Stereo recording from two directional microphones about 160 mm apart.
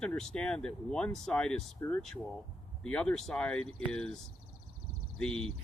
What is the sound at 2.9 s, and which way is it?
Speech, 5° left (ahead or behind).